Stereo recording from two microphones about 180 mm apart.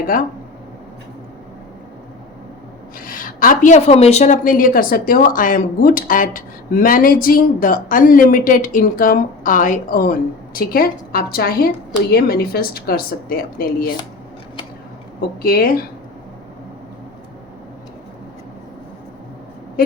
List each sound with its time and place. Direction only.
3.1 s a woman's voice: 50° left (ahead or behind)
15.4 s a woman's voice: 55° left (ahead or behind)